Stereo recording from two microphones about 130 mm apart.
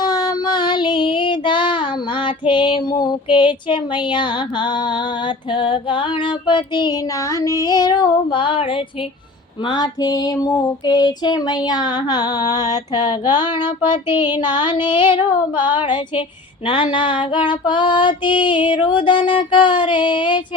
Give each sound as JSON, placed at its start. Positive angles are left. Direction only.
{"t": 0.0, "sound": "child singing", "side_deg": 30}
{"t": 9.6, "sound": "female singing", "side_deg": 30}